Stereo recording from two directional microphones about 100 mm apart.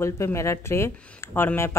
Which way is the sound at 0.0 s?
30° left (ahead or behind).